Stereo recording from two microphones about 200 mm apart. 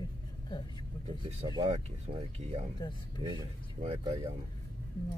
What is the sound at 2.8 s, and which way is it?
Speech, 20° left (ahead or behind).